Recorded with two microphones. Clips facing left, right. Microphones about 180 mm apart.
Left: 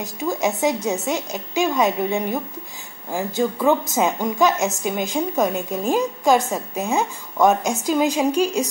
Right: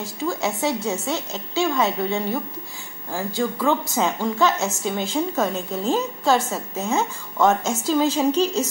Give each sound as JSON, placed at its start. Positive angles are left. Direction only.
{"t": 0.0, "sound": "a woman's voice", "side_deg": 20}